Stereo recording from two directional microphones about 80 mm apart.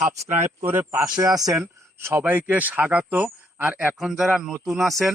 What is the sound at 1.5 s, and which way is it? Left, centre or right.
Speech, right.